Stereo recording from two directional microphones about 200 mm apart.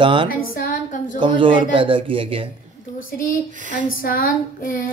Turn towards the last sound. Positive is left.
turn(degrees=45)  # may be behind; listen again after turning